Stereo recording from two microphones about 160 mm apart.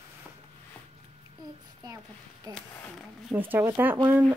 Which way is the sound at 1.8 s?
20° right (ahead or behind).